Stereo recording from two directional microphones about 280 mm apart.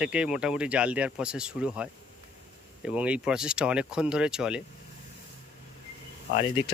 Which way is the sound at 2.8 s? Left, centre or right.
Centre.